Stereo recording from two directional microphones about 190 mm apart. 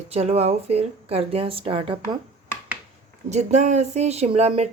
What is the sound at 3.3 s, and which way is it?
Speech, 40° right (ahead or behind).